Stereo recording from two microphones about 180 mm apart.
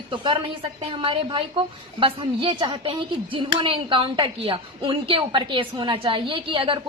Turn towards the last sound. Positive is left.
turn(degrees=-30)  # may be behind; listen again after turning